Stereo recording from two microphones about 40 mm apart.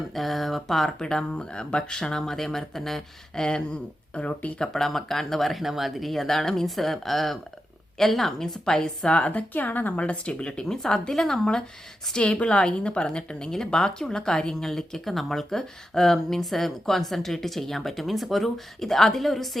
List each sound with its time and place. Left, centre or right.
0.1 s speech: centre
1.0 s a woman's voice: left
4.2 s speech: left
4.6 s a woman's voice: centre
8.6 s a woman's voice: centre
9.0 s speech: left
9.5 s a woman's voice: left
10.0 s a woman's voice: left
12.1 s a woman's voice: left; by 19.5 s centre